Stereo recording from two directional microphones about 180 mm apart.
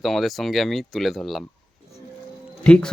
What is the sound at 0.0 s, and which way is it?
Speech, centre (ahead or behind).